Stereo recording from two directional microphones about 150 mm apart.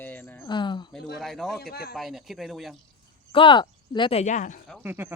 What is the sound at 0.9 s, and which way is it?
Speech, centre (ahead or behind).